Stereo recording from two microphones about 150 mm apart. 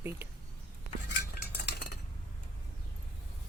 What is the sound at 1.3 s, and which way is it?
Cutlery, 90° left.